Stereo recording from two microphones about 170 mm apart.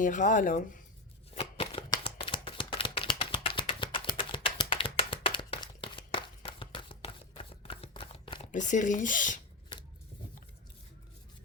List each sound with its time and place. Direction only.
0.0 s speech: 50° left (ahead or behind)
1.3 s shuffling cards: 35° left (ahead or behind)
8.5 s speech: 45° left (ahead or behind)